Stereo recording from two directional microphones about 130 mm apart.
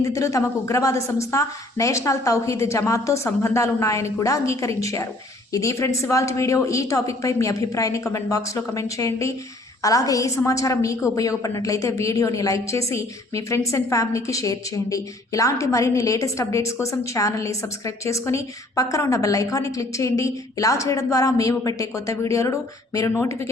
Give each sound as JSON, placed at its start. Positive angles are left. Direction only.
{"t": 0.0, "sound": "a woman's voice", "side_deg": 25}